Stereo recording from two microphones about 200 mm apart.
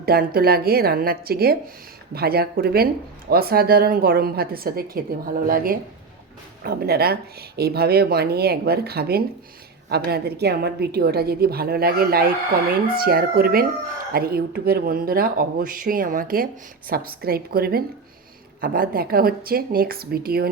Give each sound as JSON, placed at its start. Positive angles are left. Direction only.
{"t": 0.0, "sound": "a woman's voice", "side_deg": -50}